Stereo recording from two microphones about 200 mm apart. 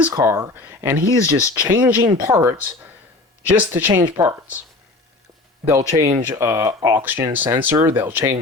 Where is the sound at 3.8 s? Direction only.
10° right (ahead or behind).